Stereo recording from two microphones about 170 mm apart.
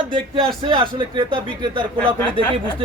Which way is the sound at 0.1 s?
30° right (ahead or behind).